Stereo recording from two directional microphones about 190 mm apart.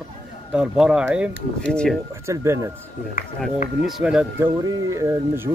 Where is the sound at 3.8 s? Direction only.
5° right (ahead or behind).